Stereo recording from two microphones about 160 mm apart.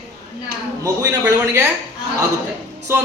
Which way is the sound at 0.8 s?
20° right (ahead or behind).